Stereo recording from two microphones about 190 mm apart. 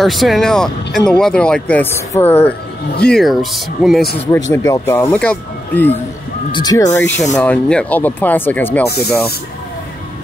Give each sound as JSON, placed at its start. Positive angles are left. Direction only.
{"t": 0.0, "sound": "speech", "side_deg": 0}
{"t": 4.5, "sound": "speech", "side_deg": 15}
{"t": 6.5, "sound": "speech", "side_deg": 20}
{"t": 8.8, "sound": "speech", "side_deg": 55}